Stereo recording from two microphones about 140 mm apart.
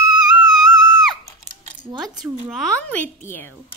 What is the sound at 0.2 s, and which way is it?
Music, 5° right (ahead or behind).